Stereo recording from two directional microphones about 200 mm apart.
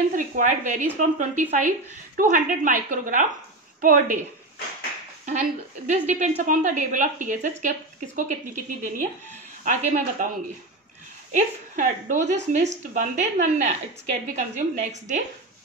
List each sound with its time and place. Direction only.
0.1 s a woman's voice: 40° right (ahead or behind)
5.9 s a woman's voice: 35° right (ahead or behind)
11.3 s a woman's voice: 40° right (ahead or behind)